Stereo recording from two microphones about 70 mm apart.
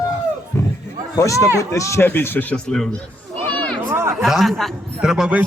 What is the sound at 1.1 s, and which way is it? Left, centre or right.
Speech, left.